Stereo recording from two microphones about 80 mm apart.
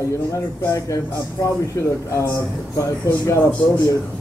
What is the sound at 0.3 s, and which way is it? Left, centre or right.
Speech, left.